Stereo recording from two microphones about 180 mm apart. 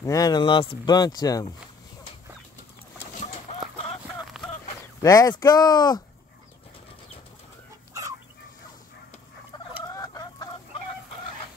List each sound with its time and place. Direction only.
0.0 s speech: 20° left (ahead or behind)
5.0 s speech: 20° left (ahead or behind)
9.8 s chicken: 20° left (ahead or behind)